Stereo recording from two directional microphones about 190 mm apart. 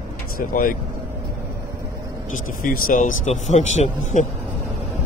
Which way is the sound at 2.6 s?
45° left (ahead or behind).